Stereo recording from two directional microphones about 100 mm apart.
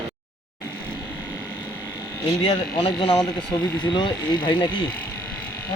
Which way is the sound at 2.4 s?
60° left (ahead or behind).